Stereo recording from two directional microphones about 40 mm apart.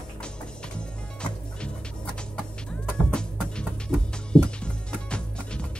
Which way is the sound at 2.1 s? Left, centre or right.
Left.